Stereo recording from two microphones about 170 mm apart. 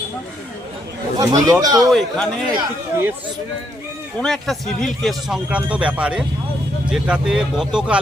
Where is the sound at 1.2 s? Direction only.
20° right (ahead or behind).